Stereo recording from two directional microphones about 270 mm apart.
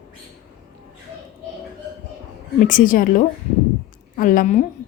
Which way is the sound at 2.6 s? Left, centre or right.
Left.